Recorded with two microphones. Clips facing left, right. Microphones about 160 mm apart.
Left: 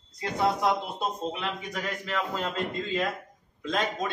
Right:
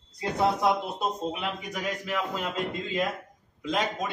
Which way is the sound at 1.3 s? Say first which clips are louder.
Even; 10° right (ahead or behind).